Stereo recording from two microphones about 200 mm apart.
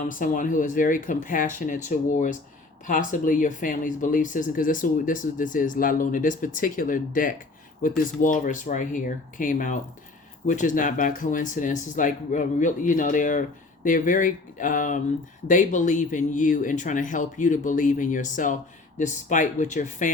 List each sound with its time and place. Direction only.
0.0 s speech: 40° left (ahead or behind)